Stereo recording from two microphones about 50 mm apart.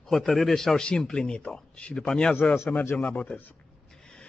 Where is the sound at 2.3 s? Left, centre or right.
Left.